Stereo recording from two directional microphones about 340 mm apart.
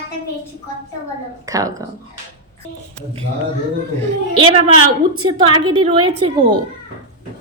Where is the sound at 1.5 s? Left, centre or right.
Centre.